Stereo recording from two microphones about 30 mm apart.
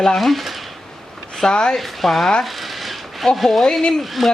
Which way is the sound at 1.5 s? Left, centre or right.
Left.